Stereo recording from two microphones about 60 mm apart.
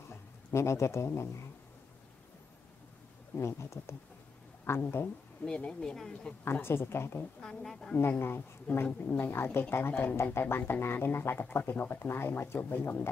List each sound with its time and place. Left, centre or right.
0.5 s speech: left
3.3 s speech: left
5.4 s speech: centre
6.4 s speech: left
7.4 s speech: centre
8.2 s speech: left